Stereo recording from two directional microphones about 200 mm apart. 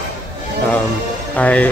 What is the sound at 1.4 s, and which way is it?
Speech, 5° left (ahead or behind).